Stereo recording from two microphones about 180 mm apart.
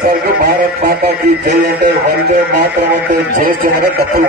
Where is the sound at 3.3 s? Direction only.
50° right (ahead or behind).